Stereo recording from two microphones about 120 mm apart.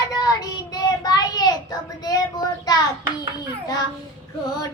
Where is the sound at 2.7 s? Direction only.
30° left (ahead or behind).